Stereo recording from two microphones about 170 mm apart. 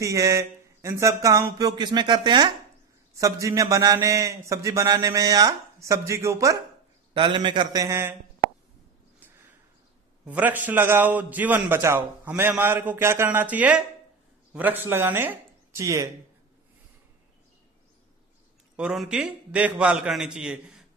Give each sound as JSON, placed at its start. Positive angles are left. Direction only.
{"t": 0.0, "sound": "a man's voice", "side_deg": -20}
{"t": 7.2, "sound": "a man's voice", "side_deg": -30}
{"t": 10.2, "sound": "a man's voice", "side_deg": -10}
{"t": 18.8, "sound": "a man's voice", "side_deg": -5}